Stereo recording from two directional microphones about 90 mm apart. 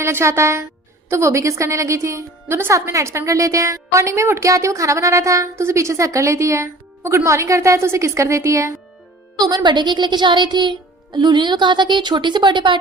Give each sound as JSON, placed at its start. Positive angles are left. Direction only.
{"t": 0.0, "sound": "a woman's voice", "side_deg": -30}
{"t": 9.6, "sound": "music", "side_deg": -55}